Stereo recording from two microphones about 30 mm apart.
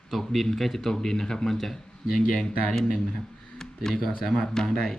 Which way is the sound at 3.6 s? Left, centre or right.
Centre.